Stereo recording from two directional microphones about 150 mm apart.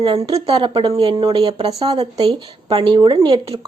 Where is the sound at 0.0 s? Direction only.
30° right (ahead or behind).